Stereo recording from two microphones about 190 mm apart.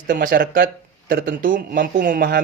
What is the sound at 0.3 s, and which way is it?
Speech, 50° right (ahead or behind).